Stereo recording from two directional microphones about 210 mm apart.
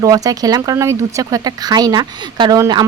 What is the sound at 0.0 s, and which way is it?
Speech, 15° right (ahead or behind).